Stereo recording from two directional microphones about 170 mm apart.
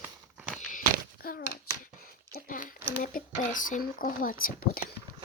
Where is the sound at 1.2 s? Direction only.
60° left (ahead or behind).